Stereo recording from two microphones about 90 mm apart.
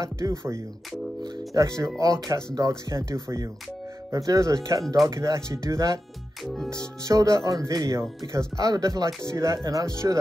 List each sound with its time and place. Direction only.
0.0 s speech: 35° right (ahead or behind)
6.4 s music: centre (ahead or behind)
6.7 s speech: 35° right (ahead or behind)